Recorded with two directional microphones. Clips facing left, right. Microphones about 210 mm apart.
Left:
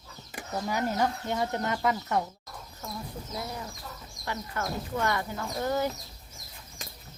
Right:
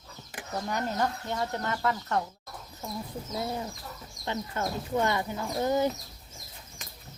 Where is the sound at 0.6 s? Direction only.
10° left (ahead or behind).